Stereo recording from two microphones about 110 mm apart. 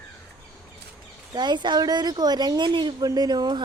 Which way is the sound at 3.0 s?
35° right (ahead or behind).